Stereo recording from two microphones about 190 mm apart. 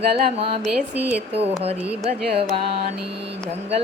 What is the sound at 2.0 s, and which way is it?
Carnatic music, 30° right (ahead or behind).